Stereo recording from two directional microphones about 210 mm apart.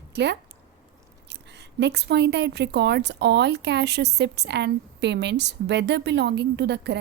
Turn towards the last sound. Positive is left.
turn(degrees=-55)  # may be behind; listen again after turning